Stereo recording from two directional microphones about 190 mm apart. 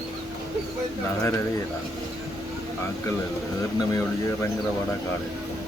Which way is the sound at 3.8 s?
15° left (ahead or behind).